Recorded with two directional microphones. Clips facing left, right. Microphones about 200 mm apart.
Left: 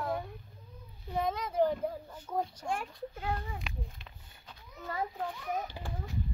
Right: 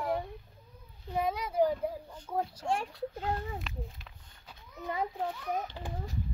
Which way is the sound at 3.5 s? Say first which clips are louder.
Right 2 dB; centre (ahead or behind).